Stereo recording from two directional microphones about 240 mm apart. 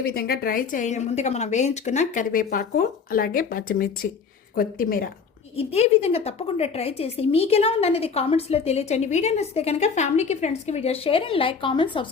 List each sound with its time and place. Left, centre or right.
0.0 s a woman's voice: left
5.5 s a woman's voice: left